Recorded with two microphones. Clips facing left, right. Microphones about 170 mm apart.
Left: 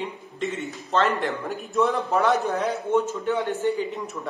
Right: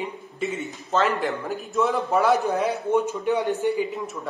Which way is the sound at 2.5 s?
15° right (ahead or behind).